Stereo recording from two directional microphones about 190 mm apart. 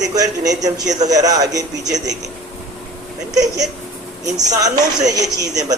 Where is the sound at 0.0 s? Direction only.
20° right (ahead or behind).